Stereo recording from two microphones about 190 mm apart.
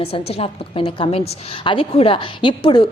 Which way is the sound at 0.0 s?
30° left (ahead or behind).